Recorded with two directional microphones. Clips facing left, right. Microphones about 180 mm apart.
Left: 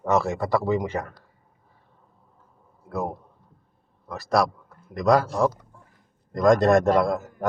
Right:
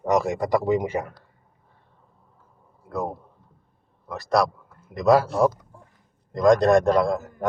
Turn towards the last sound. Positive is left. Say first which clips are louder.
# even
turn(degrees=0)  # may be behind; listen again after turning